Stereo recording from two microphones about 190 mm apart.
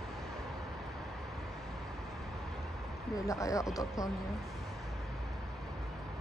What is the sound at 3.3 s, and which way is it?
Speech, 15° left (ahead or behind).